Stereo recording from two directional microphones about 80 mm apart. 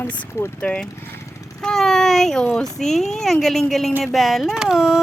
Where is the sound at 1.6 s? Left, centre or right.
Centre.